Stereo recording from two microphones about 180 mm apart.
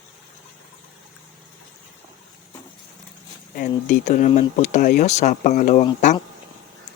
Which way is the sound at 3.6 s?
45° left (ahead or behind).